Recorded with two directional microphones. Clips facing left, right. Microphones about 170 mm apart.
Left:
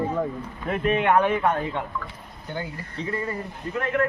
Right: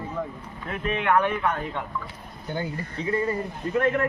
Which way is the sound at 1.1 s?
20° left (ahead or behind).